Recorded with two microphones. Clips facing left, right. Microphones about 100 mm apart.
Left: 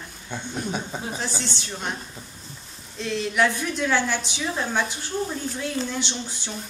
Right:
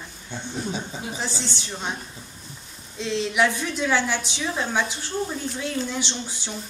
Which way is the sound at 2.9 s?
15° right (ahead or behind).